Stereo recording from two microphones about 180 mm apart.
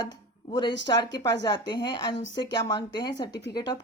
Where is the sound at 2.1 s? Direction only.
90° left.